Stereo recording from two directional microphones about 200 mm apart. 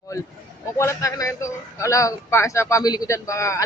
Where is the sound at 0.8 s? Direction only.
15° left (ahead or behind).